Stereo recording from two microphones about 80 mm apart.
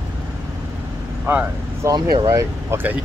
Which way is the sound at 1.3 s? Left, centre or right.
Right.